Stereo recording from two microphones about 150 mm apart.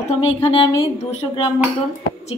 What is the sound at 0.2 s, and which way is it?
Speech, 40° left (ahead or behind).